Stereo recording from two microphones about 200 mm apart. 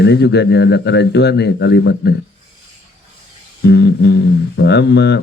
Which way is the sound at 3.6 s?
60° left (ahead or behind).